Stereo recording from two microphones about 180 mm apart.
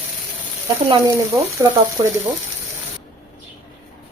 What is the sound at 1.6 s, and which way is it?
Speech, 15° right (ahead or behind).